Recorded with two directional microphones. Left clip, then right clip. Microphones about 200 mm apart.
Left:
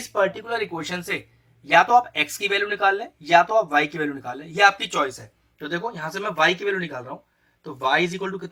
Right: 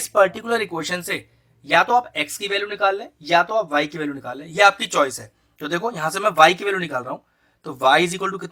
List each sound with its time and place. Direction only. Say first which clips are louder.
0.1 s speech: right 5 dB; 55° right (ahead or behind); by 1.2 s 35° right (ahead or behind)
1.6 s speech: left 1 dB; 25° right (ahead or behind); by 8.4 s 55° right (ahead or behind)